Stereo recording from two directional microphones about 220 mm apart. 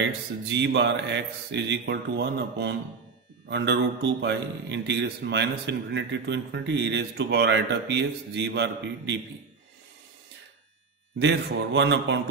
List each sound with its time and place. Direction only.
0.5 s a man's voice: 55° right (ahead or behind)
11.1 s a man's voice: 55° right (ahead or behind)